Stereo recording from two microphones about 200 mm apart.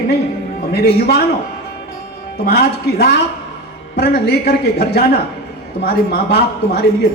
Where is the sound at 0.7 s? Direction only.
50° left (ahead or behind).